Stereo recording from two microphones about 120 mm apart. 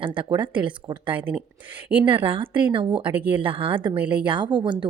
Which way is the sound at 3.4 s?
45° right (ahead or behind).